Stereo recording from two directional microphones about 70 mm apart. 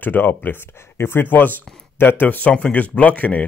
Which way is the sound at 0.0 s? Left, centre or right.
Left.